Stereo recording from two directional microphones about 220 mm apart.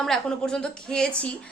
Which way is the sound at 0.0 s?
Centre (ahead or behind).